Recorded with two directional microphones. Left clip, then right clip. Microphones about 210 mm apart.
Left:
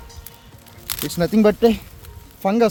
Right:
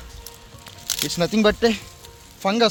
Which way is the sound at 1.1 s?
25° left (ahead or behind).